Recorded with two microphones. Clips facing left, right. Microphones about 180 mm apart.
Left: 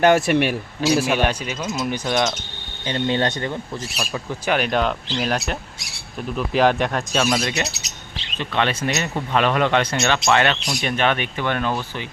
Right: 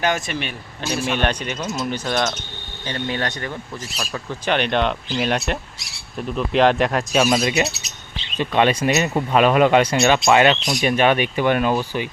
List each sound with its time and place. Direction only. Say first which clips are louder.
0.0 s speech: left 7 dB; 65° left (ahead or behind); by 1.0 s 90° left
1.1 s speech: left 1 dB; 10° left (ahead or behind); by 3.6 s 25° left (ahead or behind)
3.9 s speech: even; 10° left (ahead or behind); by 12.0 s 15° right (ahead or behind)